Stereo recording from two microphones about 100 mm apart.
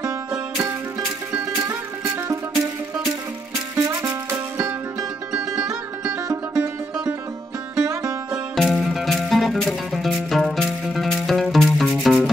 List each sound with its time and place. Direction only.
0.0 s music: 35° right (ahead or behind)
3.7 s music: 35° right (ahead or behind)
7.8 s music: 30° right (ahead or behind)
8.5 s music: centre (ahead or behind)